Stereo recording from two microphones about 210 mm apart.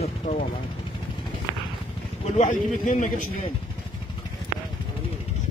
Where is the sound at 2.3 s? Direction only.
35° left (ahead or behind).